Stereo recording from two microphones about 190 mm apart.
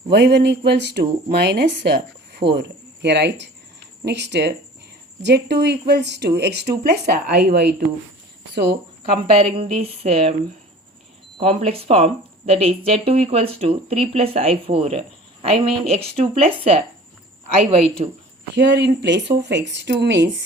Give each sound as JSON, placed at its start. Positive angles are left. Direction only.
{"t": 0.1, "sound": "speech", "side_deg": -60}
{"t": 9.1, "sound": "speech", "side_deg": -30}
{"t": 11.3, "sound": "speech", "side_deg": -30}
{"t": 18.0, "sound": "speech", "side_deg": -30}
{"t": 18.5, "sound": "speech", "side_deg": -65}